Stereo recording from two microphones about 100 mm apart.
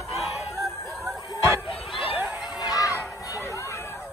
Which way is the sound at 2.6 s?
35° left (ahead or behind).